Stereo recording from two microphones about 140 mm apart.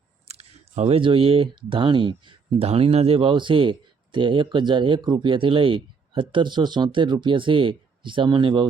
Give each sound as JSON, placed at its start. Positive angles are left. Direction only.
{"t": 0.3, "sound": "speech", "side_deg": -50}